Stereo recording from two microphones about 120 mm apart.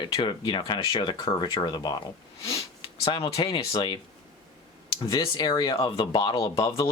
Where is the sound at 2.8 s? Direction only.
50° left (ahead or behind).